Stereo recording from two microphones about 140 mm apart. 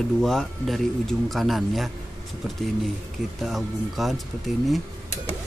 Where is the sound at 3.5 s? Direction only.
Centre (ahead or behind).